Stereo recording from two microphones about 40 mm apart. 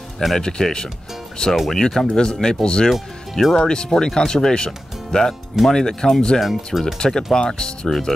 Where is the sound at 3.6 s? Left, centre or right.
Centre.